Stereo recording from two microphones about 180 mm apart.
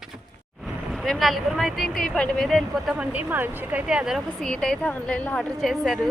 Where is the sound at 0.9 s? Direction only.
Centre (ahead or behind).